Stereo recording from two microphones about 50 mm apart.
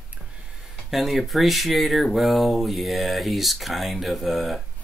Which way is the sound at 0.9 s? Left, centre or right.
Centre.